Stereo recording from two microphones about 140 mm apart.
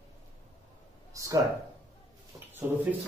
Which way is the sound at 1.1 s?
25° right (ahead or behind).